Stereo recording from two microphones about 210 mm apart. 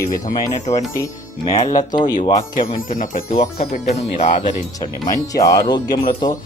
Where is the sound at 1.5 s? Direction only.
30° left (ahead or behind).